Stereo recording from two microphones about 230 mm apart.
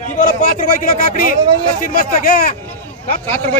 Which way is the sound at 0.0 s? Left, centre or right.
Left.